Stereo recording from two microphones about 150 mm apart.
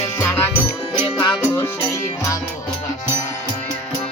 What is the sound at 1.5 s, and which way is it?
Music, 15° left (ahead or behind).